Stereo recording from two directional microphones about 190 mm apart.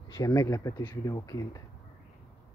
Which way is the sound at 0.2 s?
15° left (ahead or behind).